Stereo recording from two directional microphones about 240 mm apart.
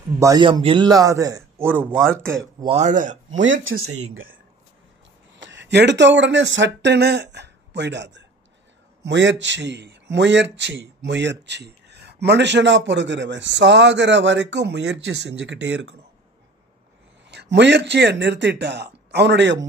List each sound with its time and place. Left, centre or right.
0.2 s a man's voice: centre
2.6 s speech: right
3.4 s speech: right
17.3 s speech: right